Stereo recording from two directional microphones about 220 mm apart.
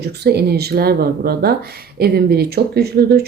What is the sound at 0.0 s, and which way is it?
Speech, 45° right (ahead or behind).